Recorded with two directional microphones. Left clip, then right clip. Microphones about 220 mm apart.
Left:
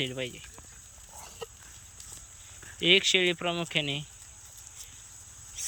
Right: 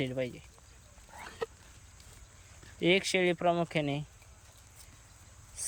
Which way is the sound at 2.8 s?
15° right (ahead or behind).